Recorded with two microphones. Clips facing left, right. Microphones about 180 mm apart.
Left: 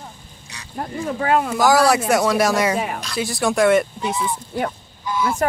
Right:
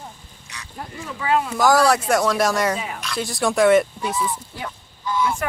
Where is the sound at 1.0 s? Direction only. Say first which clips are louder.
Left 3 dB; 45° left (ahead or behind).